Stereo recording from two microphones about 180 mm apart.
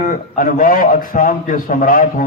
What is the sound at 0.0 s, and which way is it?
A man's voice, 50° left (ahead or behind).